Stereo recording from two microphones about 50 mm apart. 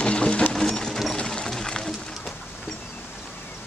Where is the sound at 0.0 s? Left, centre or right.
Left.